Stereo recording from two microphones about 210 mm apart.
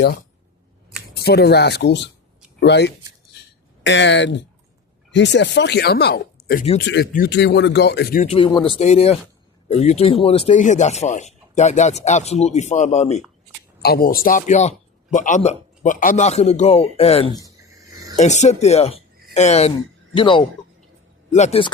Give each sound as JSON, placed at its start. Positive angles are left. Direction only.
{"t": 1.1, "sound": "speech", "side_deg": 50}
{"t": 8.2, "sound": "speech", "side_deg": 25}
{"t": 13.8, "sound": "speech", "side_deg": 45}